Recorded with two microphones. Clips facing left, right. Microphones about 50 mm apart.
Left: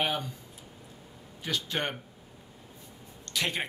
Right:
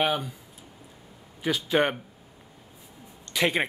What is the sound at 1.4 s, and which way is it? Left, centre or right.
Speech, centre.